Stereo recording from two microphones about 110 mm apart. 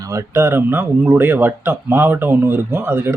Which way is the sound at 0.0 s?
30° right (ahead or behind).